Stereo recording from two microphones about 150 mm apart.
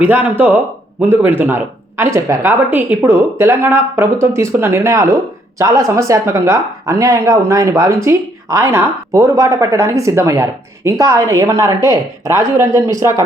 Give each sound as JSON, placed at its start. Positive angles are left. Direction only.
{"t": 0.0, "sound": "speech", "side_deg": -10}